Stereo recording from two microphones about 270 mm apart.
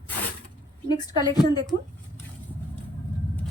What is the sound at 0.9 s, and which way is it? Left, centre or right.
Speech, centre.